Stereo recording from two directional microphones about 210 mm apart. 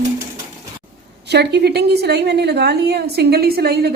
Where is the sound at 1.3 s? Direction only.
50° right (ahead or behind).